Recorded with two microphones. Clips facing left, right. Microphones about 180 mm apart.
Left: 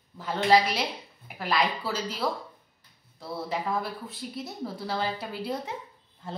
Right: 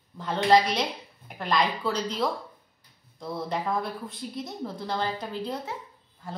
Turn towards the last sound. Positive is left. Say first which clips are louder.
# left 1 dB
turn(degrees=25)  # may be behind; listen again after turning